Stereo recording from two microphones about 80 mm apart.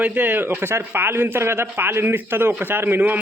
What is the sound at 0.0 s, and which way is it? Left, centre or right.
Speech, right.